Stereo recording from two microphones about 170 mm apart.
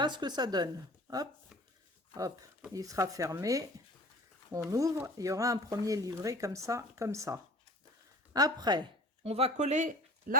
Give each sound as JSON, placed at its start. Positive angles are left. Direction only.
{"t": 0.0, "sound": "speech", "side_deg": -25}
{"t": 2.7, "sound": "speech", "side_deg": -20}
{"t": 9.2, "sound": "speech", "side_deg": -35}